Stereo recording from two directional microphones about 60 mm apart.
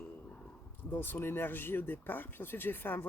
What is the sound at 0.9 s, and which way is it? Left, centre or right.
Speech, left.